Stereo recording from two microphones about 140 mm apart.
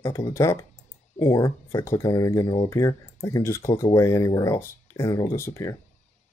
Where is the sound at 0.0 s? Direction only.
20° left (ahead or behind).